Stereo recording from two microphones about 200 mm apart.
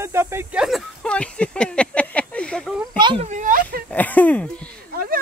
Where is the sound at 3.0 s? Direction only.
25° right (ahead or behind).